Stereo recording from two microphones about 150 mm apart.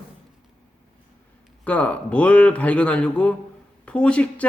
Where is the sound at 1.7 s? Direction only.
10° left (ahead or behind).